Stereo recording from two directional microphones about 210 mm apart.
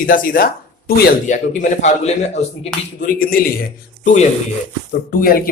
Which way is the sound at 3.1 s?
45° left (ahead or behind).